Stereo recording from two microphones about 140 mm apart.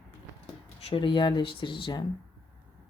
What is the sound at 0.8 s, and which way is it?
Speech, 40° left (ahead or behind).